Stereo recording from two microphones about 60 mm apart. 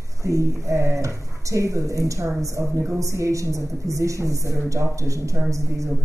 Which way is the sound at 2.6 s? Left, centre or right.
Right.